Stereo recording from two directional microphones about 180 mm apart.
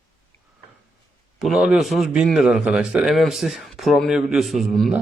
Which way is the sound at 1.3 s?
Centre (ahead or behind).